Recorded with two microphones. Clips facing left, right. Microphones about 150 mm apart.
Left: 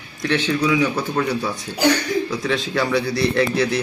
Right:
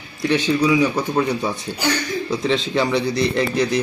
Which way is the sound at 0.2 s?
10° right (ahead or behind).